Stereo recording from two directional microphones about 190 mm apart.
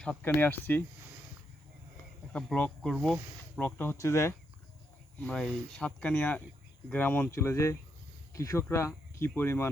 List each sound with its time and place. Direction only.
0.0 s speech: 5° left (ahead or behind)
2.3 s speech: 5° left (ahead or behind)
3.8 s speech: 15° left (ahead or behind)